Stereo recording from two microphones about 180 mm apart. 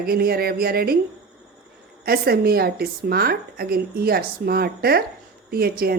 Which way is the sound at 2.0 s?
60° right (ahead or behind).